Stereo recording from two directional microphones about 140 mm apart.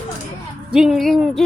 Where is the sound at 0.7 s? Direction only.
5° right (ahead or behind).